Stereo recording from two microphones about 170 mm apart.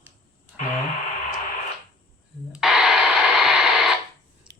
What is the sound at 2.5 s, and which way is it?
Radio, 5° right (ahead or behind).